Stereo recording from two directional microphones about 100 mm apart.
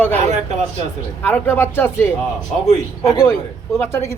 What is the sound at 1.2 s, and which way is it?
Speech, 20° left (ahead or behind).